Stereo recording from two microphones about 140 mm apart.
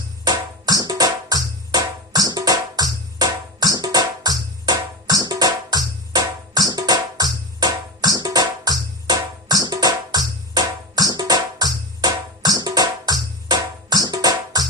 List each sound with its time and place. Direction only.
0.3 s music: 25° right (ahead or behind)